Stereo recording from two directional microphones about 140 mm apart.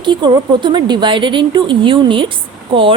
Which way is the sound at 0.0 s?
35° right (ahead or behind).